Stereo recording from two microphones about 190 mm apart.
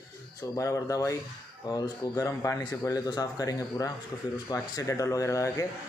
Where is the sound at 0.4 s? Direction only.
15° left (ahead or behind).